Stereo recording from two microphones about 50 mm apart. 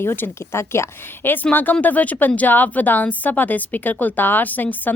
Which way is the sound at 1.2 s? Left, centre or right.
Left.